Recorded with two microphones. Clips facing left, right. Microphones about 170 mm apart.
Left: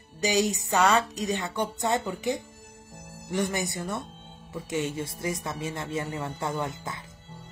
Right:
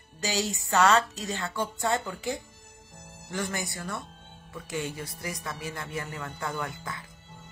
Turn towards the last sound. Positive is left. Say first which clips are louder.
# left 3 dB
turn(degrees=20)  # may be behind; listen again after turning